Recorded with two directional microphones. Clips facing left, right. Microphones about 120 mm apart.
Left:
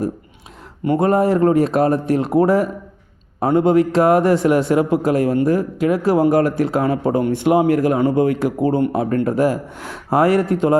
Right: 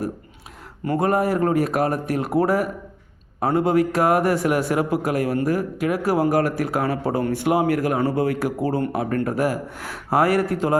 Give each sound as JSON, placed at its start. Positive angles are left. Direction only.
{"t": 0.9, "sound": "speech", "side_deg": 25}